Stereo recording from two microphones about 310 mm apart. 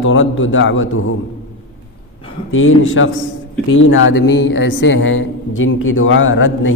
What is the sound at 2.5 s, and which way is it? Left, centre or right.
A man's voice, left.